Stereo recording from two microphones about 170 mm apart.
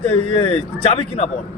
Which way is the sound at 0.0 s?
35° left (ahead or behind).